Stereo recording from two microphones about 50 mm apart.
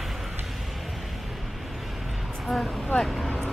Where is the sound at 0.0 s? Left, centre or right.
Centre.